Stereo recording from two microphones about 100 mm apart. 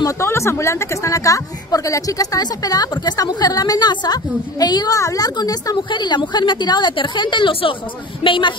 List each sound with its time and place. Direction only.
0.0 s speech: 30° left (ahead or behind); by 8.5 s 55° left (ahead or behind)